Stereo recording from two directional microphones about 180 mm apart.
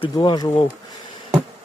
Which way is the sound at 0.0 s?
25° left (ahead or behind).